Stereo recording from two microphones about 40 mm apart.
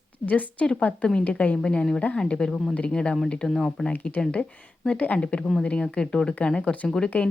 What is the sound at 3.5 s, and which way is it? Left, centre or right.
Speech, centre.